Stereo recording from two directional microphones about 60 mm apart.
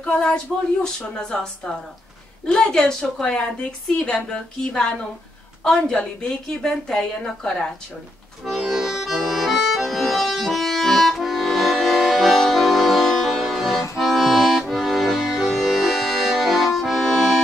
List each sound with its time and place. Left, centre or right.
0.1 s a woman's voice: centre
8.5 s accordion: centre